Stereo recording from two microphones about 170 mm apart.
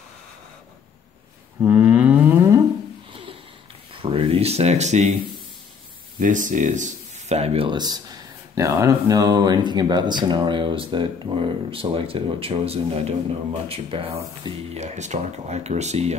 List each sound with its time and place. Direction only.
1.6 s cattle: 10° right (ahead or behind)
3.1 s sniff: 30° right (ahead or behind)
3.9 s a sound: 30° right (ahead or behind)
6.1 s speech: 50° right (ahead or behind)